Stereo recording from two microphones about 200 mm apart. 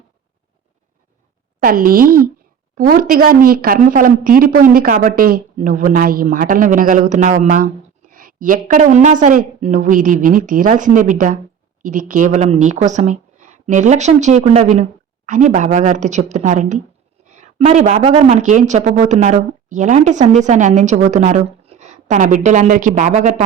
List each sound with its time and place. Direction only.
1.5 s a woman's voice: 45° right (ahead or behind)